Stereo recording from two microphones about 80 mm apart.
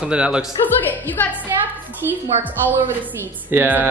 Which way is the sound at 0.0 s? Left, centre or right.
Centre.